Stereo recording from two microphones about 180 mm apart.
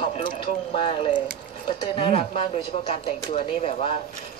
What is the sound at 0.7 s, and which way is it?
A woman's voice, 30° left (ahead or behind).